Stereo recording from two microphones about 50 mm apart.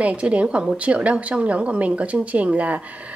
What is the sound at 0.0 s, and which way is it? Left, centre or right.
Speech, right.